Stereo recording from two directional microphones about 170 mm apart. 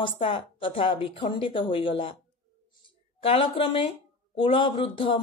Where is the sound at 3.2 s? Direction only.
35° left (ahead or behind).